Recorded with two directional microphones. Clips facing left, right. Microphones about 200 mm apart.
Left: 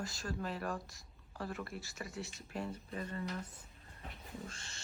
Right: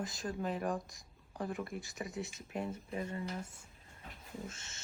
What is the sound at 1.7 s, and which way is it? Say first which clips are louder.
Speech: right 3 dB; centre (ahead or behind).